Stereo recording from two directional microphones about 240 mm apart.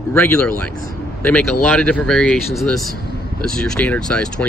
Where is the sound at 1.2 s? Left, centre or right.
Centre.